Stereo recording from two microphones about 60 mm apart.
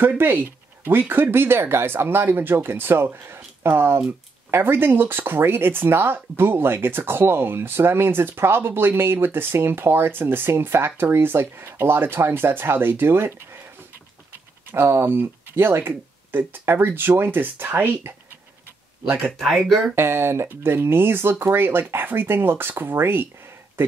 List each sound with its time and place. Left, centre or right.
0.2 s speech: right
14.7 s speech: right
19.4 s speech: centre
20.0 s speech: right